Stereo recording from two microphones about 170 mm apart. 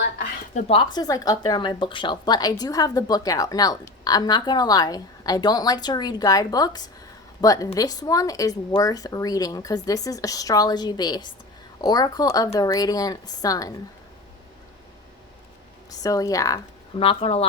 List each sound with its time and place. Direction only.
0.5 s a woman's voice: 30° left (ahead or behind)
15.9 s a woman's voice: 20° left (ahead or behind)
17.0 s speech: 35° left (ahead or behind)